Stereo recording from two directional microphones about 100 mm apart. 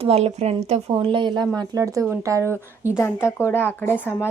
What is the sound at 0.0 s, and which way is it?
Speech, 90° right.